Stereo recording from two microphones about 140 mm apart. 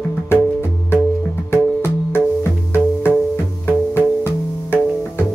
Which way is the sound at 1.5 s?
15° left (ahead or behind).